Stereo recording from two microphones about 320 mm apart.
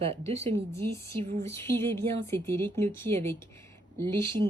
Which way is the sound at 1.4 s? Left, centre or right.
Centre.